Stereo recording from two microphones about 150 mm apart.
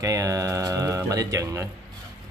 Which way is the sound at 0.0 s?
20° right (ahead or behind).